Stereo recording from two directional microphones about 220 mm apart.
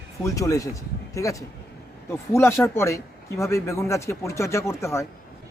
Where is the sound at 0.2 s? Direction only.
15° left (ahead or behind).